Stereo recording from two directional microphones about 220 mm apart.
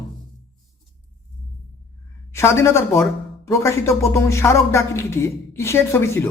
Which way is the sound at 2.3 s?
10° left (ahead or behind).